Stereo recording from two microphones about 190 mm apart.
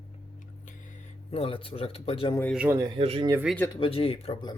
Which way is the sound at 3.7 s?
30° left (ahead or behind).